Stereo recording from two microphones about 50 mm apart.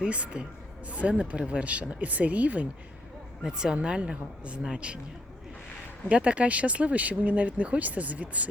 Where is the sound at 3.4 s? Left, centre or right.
Centre.